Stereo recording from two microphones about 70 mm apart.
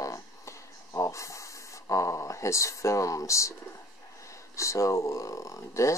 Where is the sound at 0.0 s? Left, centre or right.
Left.